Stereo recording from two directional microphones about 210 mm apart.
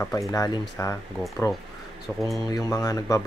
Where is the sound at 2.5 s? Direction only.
15° left (ahead or behind).